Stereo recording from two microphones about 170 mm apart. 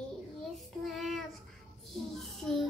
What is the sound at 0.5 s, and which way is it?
Child singing, centre (ahead or behind).